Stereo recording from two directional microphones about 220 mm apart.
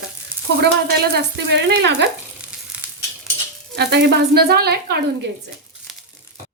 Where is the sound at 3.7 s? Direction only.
50° right (ahead or behind).